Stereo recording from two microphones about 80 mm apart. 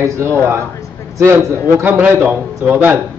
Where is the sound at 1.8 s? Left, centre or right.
Right.